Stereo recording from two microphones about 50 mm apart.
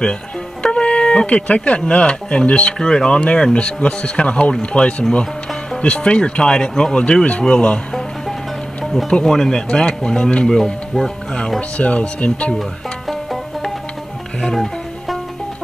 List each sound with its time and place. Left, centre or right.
0.6 s music: left
1.8 s speech: centre
9.2 s speech: centre
11.8 s speech: left
14.4 s music: centre